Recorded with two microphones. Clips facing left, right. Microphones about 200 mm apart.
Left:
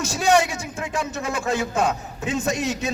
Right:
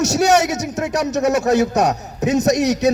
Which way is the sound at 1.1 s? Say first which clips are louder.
Right 11 dB; 40° right (ahead or behind).